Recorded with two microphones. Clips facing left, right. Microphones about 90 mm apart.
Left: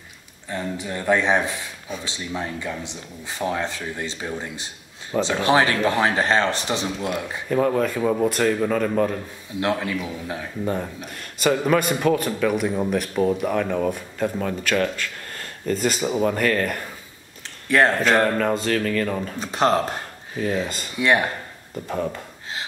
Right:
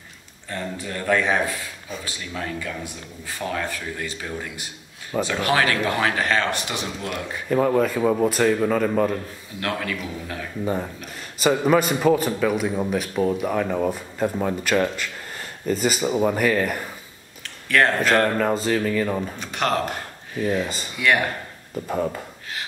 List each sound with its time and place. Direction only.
0.5 s speech: 15° left (ahead or behind)
7.4 s a man's voice: centre (ahead or behind)
9.6 s speech: 20° left (ahead or behind)
10.6 s a man's voice: 5° right (ahead or behind)
17.6 s speech: 25° left (ahead or behind)
18.3 s a man's voice: centre (ahead or behind)
19.4 s speech: 30° left (ahead or behind)
20.6 s a man's voice: centre (ahead or behind)
20.9 s speech: 25° left (ahead or behind)
21.7 s a man's voice: 5° right (ahead or behind)